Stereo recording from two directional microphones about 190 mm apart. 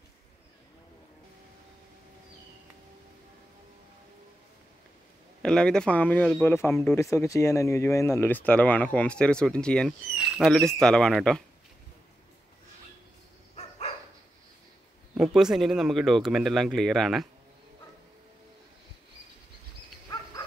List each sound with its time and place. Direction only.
5.4 s speech: 5° left (ahead or behind)
6.7 s speech: centre (ahead or behind)
7.0 s speech: 15° left (ahead or behind)
13.6 s dog: 35° left (ahead or behind)
15.1 s speech: centre (ahead or behind)
20.1 s dog: 20° left (ahead or behind)